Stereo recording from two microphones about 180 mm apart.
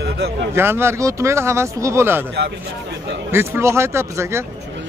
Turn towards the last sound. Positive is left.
turn(degrees=-15)  # may be behind; listen again after turning